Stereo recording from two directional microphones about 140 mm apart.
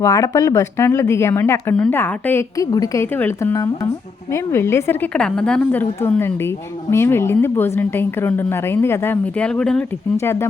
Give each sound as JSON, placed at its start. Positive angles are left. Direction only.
{"t": 0.0, "sound": "a woman's voice", "side_deg": 20}
{"t": 2.6, "sound": "a woman's voice", "side_deg": 25}
{"t": 10.2, "sound": "a woman's voice", "side_deg": 20}